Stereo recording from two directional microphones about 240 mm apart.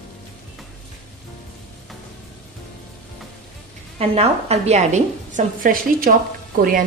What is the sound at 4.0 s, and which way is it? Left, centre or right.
A woman's voice, right.